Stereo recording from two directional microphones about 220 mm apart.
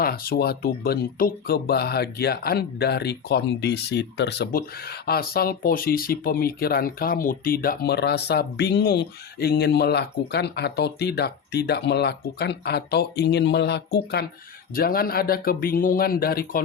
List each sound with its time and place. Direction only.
0.0 s speech: 45° left (ahead or behind)